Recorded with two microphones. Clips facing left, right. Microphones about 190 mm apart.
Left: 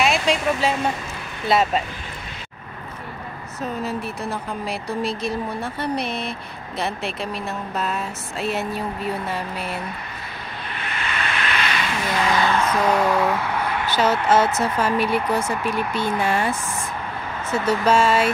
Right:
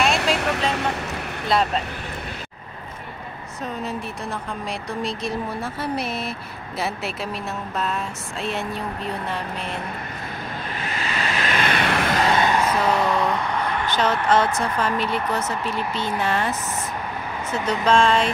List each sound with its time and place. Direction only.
0.4 s vehicle: 70° right (ahead or behind)
1.5 s speech: 5° left (ahead or behind)
3.8 s speech: centre (ahead or behind)
10.8 s vehicle: 35° right (ahead or behind); by 12.2 s 65° right (ahead or behind)
12.3 s music: 25° right (ahead or behind)
12.5 s music: 10° right (ahead or behind)
12.9 s speech: centre (ahead or behind)